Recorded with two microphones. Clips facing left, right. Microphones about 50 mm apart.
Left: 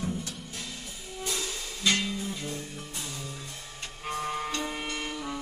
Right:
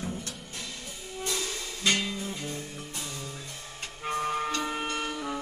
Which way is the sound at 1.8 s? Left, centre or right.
Right.